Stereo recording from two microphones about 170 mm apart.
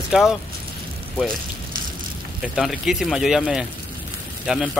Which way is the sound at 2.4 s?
5° right (ahead or behind).